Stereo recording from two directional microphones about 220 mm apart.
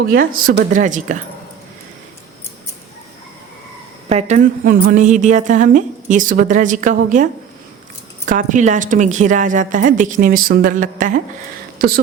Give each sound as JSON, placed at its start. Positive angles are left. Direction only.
{"t": 0.0, "sound": "a woman's voice", "side_deg": -40}
{"t": 4.1, "sound": "a woman's voice", "side_deg": -30}
{"t": 8.3, "sound": "a woman's voice", "side_deg": -35}